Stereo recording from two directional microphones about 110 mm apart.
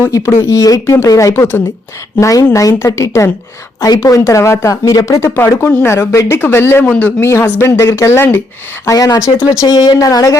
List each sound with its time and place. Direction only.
0.0 s speech: 25° left (ahead or behind)